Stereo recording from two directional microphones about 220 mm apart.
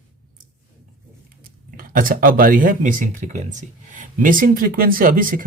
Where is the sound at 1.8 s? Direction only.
40° right (ahead or behind).